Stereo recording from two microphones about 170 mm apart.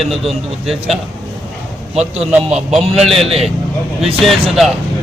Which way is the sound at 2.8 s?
35° right (ahead or behind).